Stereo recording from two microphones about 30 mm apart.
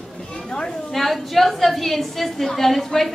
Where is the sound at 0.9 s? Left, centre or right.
Centre.